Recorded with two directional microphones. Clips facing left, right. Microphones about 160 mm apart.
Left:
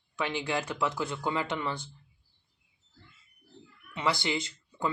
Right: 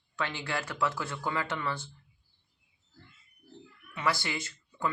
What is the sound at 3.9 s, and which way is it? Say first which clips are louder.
Speech: left 2 dB; 20° left (ahead or behind).